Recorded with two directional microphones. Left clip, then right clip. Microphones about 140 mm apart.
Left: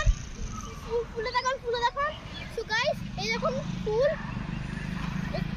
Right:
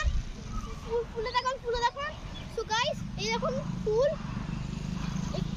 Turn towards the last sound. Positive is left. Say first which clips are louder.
# left 3 dB
turn(degrees=5)  # may be behind; listen again after turning